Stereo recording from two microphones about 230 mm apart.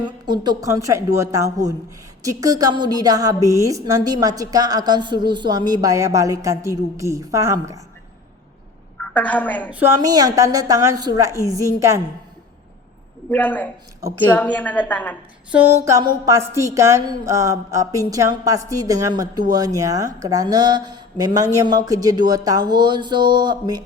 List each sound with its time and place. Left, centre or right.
0.0 s a woman's voice: centre
9.0 s a woman's voice: centre
9.6 s a woman's voice: centre
13.3 s a woman's voice: centre
15.5 s a woman's voice: centre